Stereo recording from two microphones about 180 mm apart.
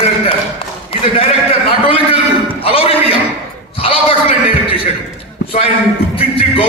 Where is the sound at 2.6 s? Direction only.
30° left (ahead or behind).